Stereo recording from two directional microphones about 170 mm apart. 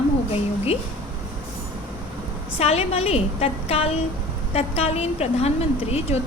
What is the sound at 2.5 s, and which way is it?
A woman's voice, 40° left (ahead or behind).